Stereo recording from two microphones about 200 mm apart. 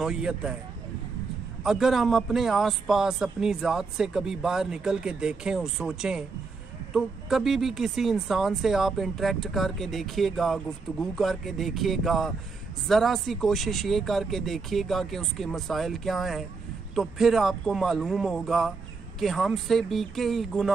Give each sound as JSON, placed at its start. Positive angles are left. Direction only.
{"t": 0.0, "sound": "a woman's voice", "side_deg": -5}
{"t": 1.6, "sound": "a woman's voice", "side_deg": 0}